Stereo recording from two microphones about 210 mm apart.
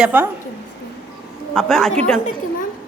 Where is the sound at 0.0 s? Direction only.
10° right (ahead or behind).